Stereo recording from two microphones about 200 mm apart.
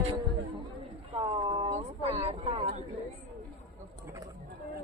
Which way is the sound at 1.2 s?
25° right (ahead or behind).